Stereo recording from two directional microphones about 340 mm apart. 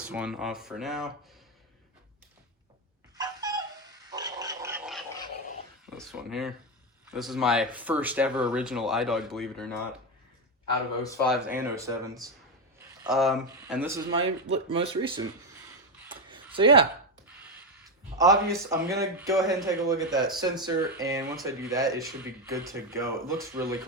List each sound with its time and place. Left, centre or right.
0.0 s speech: centre
3.2 s a sound: centre
4.1 s pig: centre
6.0 s speech: centre
11.0 s speech: centre
14.3 s speech: right
14.7 s speech: centre
16.0 s a sound: centre
18.4 s speech: centre